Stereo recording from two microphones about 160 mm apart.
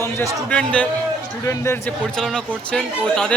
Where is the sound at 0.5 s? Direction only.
5° left (ahead or behind).